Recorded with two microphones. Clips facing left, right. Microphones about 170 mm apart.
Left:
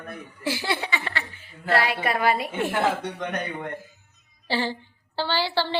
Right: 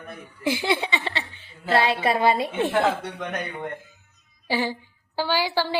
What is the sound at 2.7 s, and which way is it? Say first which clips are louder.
Speech: even; centre (ahead or behind).